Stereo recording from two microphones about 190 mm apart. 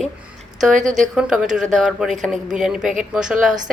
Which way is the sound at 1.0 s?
5° right (ahead or behind).